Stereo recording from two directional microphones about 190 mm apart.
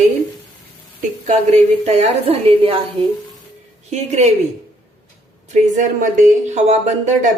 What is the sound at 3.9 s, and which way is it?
Speech, 35° right (ahead or behind).